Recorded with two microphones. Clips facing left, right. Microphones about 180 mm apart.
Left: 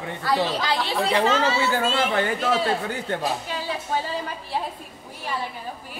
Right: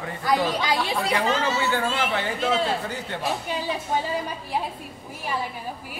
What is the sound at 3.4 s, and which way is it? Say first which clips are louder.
Speech: right 1 dB; 15° right (ahead or behind).